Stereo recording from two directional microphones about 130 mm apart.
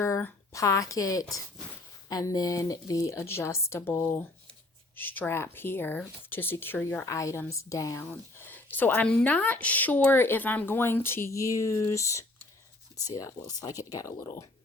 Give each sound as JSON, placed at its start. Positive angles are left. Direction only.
{"t": 0.0, "sound": "a woman's voice", "side_deg": 15}